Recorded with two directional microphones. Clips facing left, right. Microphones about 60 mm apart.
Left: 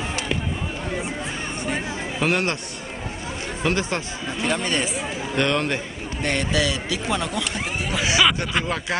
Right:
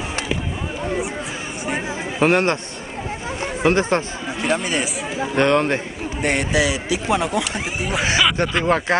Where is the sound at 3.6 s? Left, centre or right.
Right.